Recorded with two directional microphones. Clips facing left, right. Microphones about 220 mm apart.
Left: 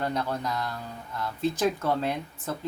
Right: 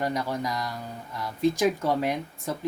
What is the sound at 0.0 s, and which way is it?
Speech, 10° right (ahead or behind).